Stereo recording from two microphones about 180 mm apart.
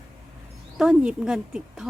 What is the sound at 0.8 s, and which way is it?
A woman's voice, 5° right (ahead or behind).